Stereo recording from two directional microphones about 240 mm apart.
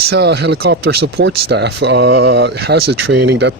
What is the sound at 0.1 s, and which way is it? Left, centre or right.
Speech, right.